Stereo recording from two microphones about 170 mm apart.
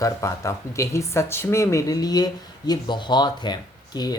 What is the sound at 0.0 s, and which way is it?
Speech, 20° left (ahead or behind).